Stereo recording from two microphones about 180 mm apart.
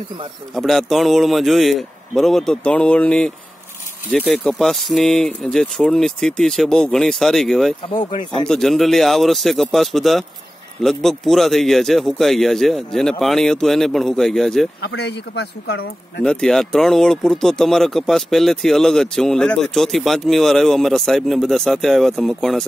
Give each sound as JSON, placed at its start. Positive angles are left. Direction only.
{"t": 0.6, "sound": "speech", "side_deg": 0}
{"t": 4.4, "sound": "speech", "side_deg": 5}
{"t": 14.8, "sound": "speech", "side_deg": 65}
{"t": 16.3, "sound": "speech", "side_deg": 5}